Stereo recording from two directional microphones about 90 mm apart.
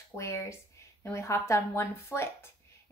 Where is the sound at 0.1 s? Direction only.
30° left (ahead or behind).